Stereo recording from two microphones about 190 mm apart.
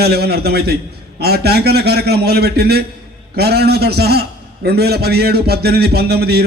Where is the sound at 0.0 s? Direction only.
55° right (ahead or behind).